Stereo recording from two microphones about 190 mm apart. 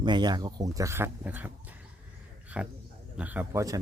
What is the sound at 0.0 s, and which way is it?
Speech, 25° right (ahead or behind).